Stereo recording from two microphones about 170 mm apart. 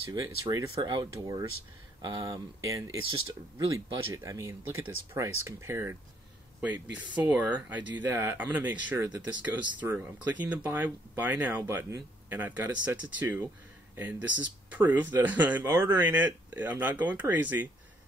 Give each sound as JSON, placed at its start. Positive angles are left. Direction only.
{"t": 0.1, "sound": "speech", "side_deg": -20}
{"t": 7.2, "sound": "speech", "side_deg": -10}